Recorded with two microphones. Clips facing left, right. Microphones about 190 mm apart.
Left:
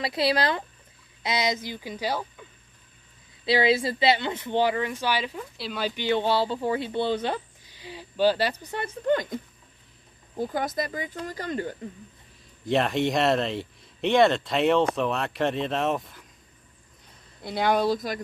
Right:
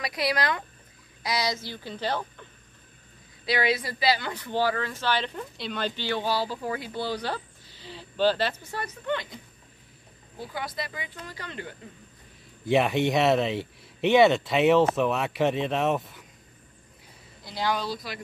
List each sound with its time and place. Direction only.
0.0 s speech: 25° left (ahead or behind); by 2.4 s 10° left (ahead or behind)
3.4 s speech: 25° left (ahead or behind); by 6.0 s 10° left (ahead or behind)
6.0 s speech: 25° left (ahead or behind)
9.0 s speech: 45° left (ahead or behind)
12.6 s speech: 5° right (ahead or behind)
17.4 s speech: 55° left (ahead or behind)